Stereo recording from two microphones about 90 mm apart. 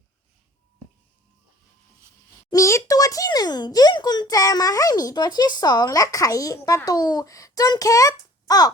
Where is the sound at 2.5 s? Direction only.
35° left (ahead or behind).